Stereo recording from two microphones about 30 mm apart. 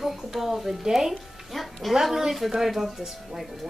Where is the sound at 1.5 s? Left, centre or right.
Centre.